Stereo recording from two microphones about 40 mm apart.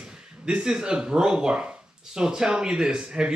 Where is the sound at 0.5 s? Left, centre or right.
Right.